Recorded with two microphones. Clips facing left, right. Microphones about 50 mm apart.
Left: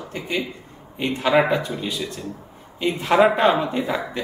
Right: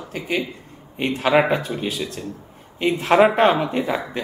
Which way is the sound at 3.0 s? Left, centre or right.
Centre.